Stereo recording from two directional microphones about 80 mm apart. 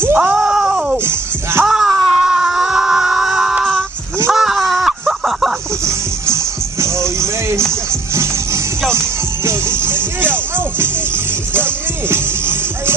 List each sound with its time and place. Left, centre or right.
0.2 s groan: centre
0.9 s music: right
1.7 s a sound: centre
5.9 s music: right
11.5 s music: right